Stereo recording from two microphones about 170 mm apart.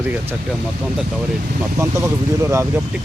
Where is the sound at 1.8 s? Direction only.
15° right (ahead or behind).